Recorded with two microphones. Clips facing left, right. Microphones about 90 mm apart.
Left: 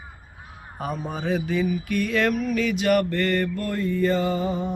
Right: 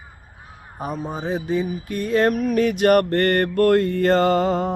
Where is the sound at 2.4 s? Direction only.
50° right (ahead or behind).